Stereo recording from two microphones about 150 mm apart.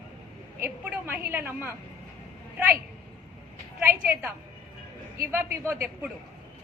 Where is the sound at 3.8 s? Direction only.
15° right (ahead or behind).